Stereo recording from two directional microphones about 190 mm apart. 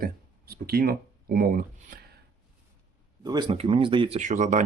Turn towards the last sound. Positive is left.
turn(degrees=-40)  # may be behind; listen again after turning